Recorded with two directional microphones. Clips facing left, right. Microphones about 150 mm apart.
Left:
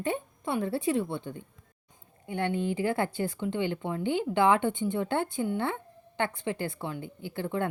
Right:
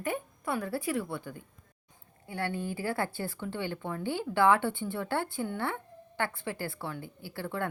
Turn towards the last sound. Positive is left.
turn(degrees=20)  # may be behind; listen again after turning